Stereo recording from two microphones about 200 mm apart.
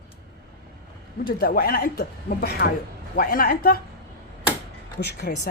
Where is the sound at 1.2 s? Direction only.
50° left (ahead or behind).